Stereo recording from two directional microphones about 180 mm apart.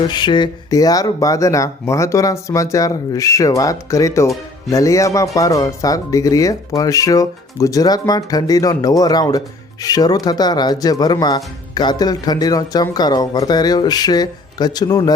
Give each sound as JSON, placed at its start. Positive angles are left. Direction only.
{"t": 0.1, "sound": "speech", "side_deg": 25}